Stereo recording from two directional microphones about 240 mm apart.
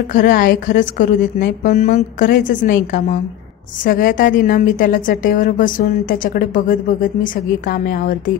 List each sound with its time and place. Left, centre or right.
0.1 s a woman's voice: left